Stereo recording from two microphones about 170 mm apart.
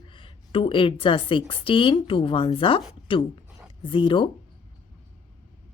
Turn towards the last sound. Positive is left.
turn(degrees=30)  # may be behind; listen again after turning